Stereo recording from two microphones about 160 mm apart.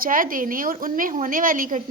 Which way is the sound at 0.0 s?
60° right (ahead or behind).